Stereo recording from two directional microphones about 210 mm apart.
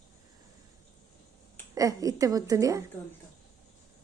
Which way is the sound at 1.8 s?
15° right (ahead or behind).